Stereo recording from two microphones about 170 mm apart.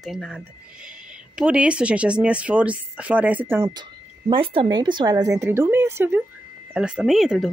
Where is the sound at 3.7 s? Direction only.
30° right (ahead or behind).